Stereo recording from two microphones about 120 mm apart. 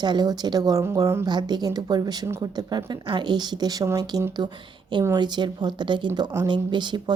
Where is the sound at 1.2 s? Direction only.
35° right (ahead or behind).